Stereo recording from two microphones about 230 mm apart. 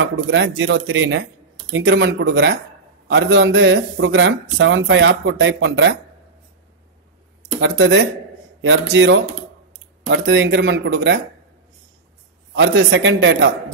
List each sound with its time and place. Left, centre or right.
0.0 s speech: right
7.6 s speech: right
12.5 s speech: right